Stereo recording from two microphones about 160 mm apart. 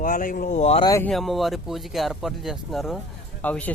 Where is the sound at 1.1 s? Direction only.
Centre (ahead or behind).